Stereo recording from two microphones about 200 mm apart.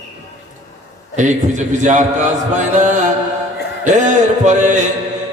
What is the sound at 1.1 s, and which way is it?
A man's voice, 40° right (ahead or behind).